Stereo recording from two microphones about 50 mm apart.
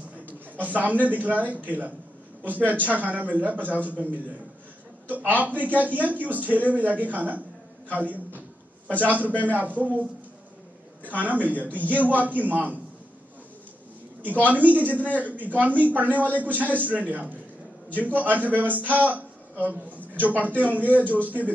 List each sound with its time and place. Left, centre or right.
0.3 s a sound: right
1.0 s a man's voice: right
11.1 s a man's voice: right
11.6 s speech: left
11.9 s a man's voice: right
14.2 s a man's voice: right
16.1 s speech: left
16.3 s a man's voice: right